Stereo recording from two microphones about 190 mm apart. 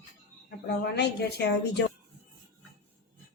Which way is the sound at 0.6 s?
60° left (ahead or behind).